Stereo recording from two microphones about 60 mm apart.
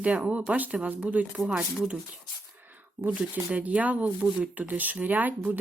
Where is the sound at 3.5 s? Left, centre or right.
Right.